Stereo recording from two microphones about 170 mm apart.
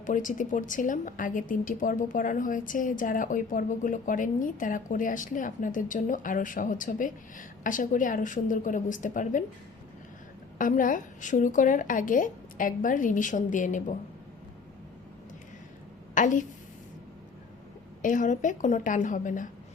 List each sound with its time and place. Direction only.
0.0 s a woman's voice: 50° left (ahead or behind)
10.6 s a woman's voice: 50° left (ahead or behind)
16.1 s a woman's voice: 50° left (ahead or behind)
18.0 s a woman's voice: 50° left (ahead or behind)